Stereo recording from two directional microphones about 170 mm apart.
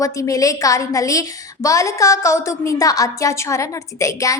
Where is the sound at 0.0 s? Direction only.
20° left (ahead or behind).